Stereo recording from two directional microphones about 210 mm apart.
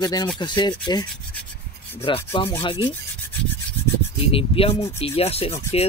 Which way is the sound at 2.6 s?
25° left (ahead or behind).